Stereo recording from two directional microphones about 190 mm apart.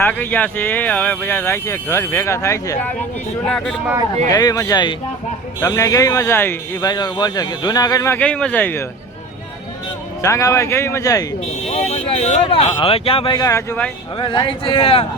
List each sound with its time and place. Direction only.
0.0 s speech: 10° left (ahead or behind)
3.5 s speech: centre (ahead or behind)
4.3 s speech: 20° left (ahead or behind)
10.2 s speech: 15° left (ahead or behind)
11.7 s speech: 35° left (ahead or behind); by 13.9 s 10° left (ahead or behind)
14.2 s speech: 25° left (ahead or behind)